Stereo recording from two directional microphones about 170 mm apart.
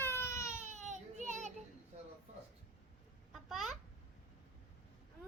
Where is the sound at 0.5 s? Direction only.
45° right (ahead or behind).